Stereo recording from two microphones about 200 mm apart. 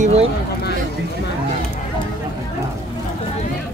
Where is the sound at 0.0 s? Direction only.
30° right (ahead or behind).